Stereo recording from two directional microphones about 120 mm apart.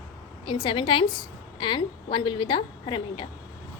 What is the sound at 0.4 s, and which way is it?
A woman's voice, 45° left (ahead or behind).